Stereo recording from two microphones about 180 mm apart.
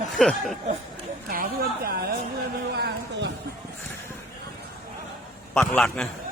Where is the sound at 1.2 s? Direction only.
55° right (ahead or behind).